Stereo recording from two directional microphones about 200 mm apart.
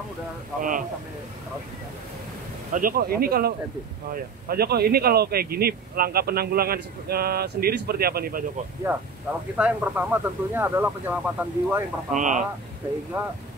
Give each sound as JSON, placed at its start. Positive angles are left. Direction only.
{"t": 0.6, "sound": "speech", "side_deg": -40}
{"t": 2.7, "sound": "speech", "side_deg": -45}
{"t": 8.9, "sound": "speech", "side_deg": -5}
{"t": 12.1, "sound": "speech", "side_deg": -40}
{"t": 13.1, "sound": "speech", "side_deg": -10}